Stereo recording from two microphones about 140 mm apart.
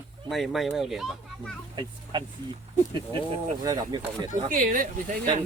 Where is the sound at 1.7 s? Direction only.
30° right (ahead or behind).